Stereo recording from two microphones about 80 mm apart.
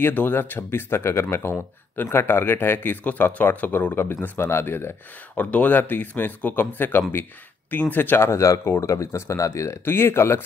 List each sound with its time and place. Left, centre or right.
0.0 s speech: left